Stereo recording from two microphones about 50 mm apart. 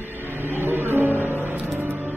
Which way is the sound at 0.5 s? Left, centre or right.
Right.